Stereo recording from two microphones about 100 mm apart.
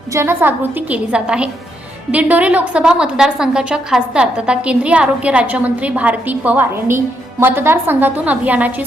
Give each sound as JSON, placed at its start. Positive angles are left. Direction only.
{"t": 0.1, "sound": "a woman's voice", "side_deg": -25}